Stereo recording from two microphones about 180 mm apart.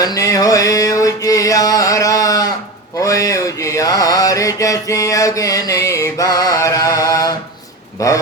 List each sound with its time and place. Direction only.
0.0 s mantra: 20° left (ahead or behind)
7.9 s a man's voice: 15° left (ahead or behind)